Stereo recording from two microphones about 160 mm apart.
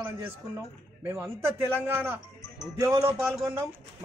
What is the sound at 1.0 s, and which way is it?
Speech, 15° right (ahead or behind).